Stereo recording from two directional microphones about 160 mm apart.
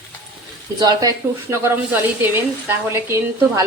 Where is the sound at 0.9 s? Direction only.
25° right (ahead or behind).